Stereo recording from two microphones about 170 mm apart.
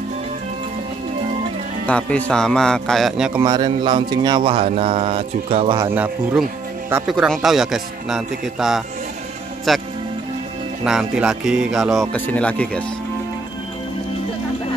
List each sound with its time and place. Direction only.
1.9 s speech: 5° left (ahead or behind)
3.4 s speech: 25° right (ahead or behind)
5.8 s a man's voice: 10° right (ahead or behind); by 12.8 s 5° left (ahead or behind)